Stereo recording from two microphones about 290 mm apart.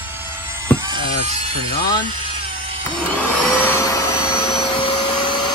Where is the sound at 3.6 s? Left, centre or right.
Centre.